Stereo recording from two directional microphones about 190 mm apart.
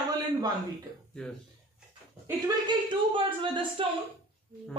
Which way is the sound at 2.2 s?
25° right (ahead or behind).